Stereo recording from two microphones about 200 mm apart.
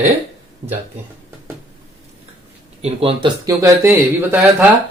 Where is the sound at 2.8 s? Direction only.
30° right (ahead or behind).